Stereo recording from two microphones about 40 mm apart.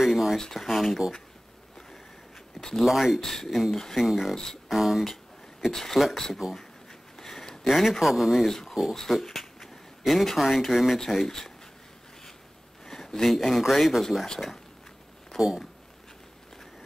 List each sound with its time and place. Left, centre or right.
0.0 s speech: centre
2.6 s a sound: centre
2.9 s speech: centre
3.2 s speech: centre
5.0 s a sound: centre
5.7 s speech: centre
6.3 s speech: centre
7.2 s speech: centre
8.5 s speech: centre
11.0 s speech: centre
12.8 s speech: centre
15.3 s speech: centre